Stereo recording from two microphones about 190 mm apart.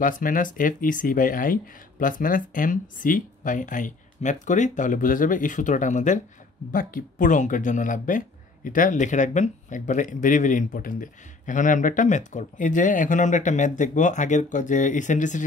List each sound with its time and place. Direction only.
0.0 s speech: 45° left (ahead or behind)